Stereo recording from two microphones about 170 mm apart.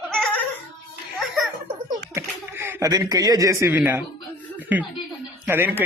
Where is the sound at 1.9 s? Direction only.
15° right (ahead or behind).